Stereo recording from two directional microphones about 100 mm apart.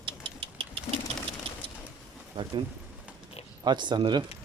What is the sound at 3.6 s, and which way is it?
Speech, 50° right (ahead or behind).